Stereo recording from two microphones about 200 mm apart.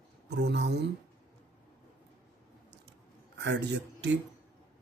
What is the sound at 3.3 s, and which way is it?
Speech, 60° right (ahead or behind).